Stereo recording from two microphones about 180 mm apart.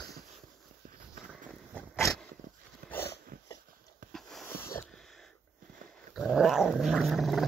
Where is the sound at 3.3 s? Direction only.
60° right (ahead or behind).